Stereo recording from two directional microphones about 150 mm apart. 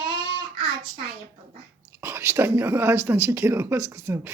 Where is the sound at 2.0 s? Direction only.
15° right (ahead or behind).